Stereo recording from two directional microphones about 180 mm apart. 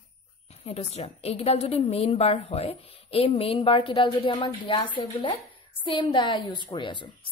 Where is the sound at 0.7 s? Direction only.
35° left (ahead or behind).